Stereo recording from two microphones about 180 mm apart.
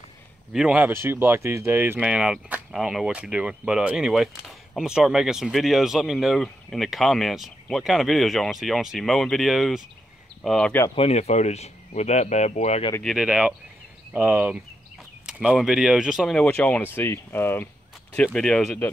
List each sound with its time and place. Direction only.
0.5 s speech: 5° right (ahead or behind)
11.0 s speech: 35° left (ahead or behind)
13.0 s speech: 5° right (ahead or behind)